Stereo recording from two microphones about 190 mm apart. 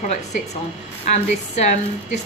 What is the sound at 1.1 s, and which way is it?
A woman's voice, 40° left (ahead or behind).